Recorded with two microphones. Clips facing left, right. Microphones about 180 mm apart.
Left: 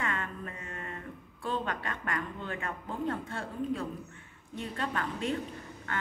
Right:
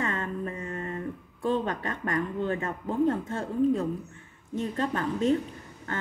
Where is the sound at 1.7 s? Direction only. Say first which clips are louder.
Right 5 dB; 30° right (ahead or behind).